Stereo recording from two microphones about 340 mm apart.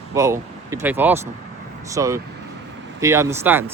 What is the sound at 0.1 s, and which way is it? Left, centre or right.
Speech, centre.